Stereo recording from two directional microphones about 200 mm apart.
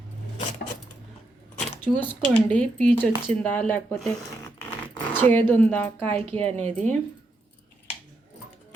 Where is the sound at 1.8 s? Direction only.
10° left (ahead or behind).